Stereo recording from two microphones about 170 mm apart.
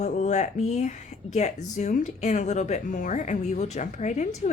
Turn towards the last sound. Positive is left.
turn(degrees=45)  # may be behind; listen again after turning